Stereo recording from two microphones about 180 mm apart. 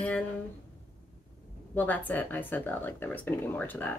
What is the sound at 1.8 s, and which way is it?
Speech, 10° left (ahead or behind).